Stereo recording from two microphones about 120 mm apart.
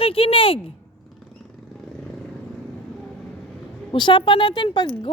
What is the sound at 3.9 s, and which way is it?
Speech, 40° left (ahead or behind).